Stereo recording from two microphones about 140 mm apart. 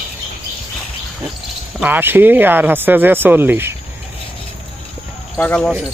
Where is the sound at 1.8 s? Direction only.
15° right (ahead or behind).